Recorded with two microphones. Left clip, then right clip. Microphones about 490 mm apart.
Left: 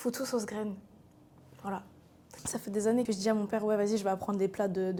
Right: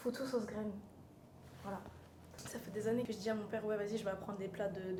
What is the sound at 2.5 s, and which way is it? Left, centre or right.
A woman's voice, left.